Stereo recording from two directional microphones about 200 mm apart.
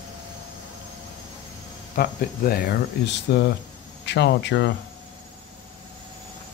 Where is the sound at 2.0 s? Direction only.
50° left (ahead or behind).